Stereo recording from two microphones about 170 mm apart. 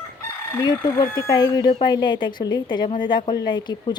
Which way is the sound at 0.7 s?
20° left (ahead or behind).